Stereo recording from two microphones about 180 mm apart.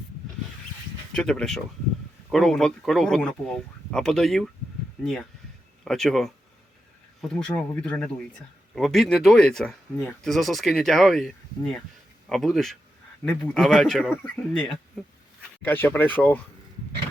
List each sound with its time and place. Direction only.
1.1 s speech: 5° left (ahead or behind)
5.8 s speech: centre (ahead or behind)
15.6 s speech: 10° left (ahead or behind)